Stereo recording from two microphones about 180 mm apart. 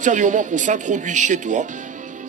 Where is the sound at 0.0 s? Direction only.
45° right (ahead or behind).